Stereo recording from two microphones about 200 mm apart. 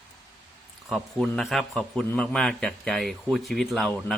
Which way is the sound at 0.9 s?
Centre (ahead or behind).